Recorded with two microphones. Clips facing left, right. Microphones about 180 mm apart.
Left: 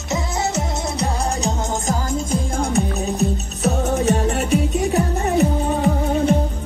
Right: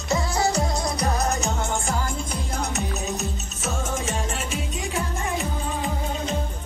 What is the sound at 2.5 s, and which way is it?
Music, 35° left (ahead or behind).